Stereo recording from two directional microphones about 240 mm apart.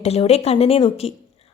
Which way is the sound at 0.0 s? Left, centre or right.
Left.